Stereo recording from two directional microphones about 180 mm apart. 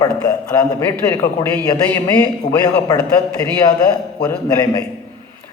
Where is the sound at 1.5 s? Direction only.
10° left (ahead or behind).